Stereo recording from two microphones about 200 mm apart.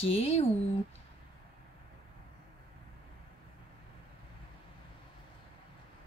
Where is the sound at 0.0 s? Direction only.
30° left (ahead or behind).